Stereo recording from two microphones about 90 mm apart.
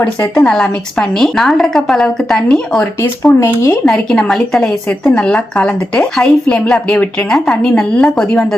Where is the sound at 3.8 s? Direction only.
5° left (ahead or behind).